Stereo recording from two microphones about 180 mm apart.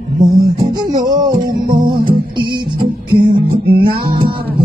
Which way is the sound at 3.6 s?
55° right (ahead or behind).